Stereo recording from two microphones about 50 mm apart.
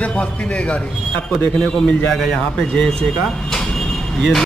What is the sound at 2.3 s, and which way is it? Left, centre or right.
Speech, centre.